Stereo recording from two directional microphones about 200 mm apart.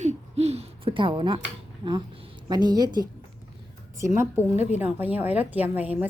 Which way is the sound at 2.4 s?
20° right (ahead or behind).